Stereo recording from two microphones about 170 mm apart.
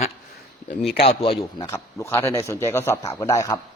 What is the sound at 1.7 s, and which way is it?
A man's voice, 15° left (ahead or behind).